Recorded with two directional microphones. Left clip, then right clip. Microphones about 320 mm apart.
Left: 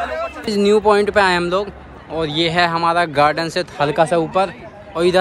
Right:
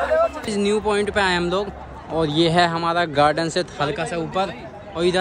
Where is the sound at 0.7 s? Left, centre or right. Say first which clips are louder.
Left 8 dB; centre.